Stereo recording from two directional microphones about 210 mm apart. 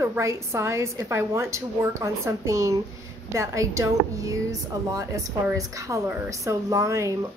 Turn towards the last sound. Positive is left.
turn(degrees=-15)  # may be behind; listen again after turning